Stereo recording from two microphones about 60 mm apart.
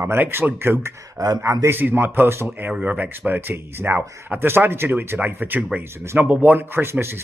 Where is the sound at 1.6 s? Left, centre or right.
Right.